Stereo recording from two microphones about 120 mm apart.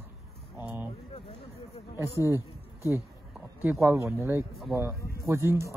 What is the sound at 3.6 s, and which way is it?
Speech, 15° right (ahead or behind).